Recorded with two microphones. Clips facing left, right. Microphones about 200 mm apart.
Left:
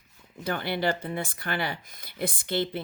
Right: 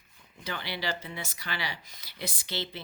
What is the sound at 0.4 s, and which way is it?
Speech, 50° left (ahead or behind).